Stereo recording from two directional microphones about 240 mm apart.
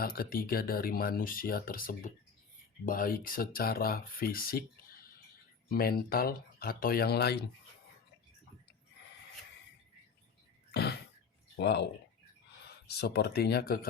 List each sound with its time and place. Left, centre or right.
0.0 s speech: left
11.5 s speech: left